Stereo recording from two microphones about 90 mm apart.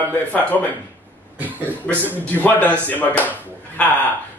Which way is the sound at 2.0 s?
20° right (ahead or behind).